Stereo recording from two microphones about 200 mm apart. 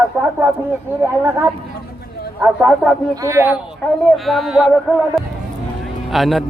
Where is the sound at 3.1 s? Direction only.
15° right (ahead or behind).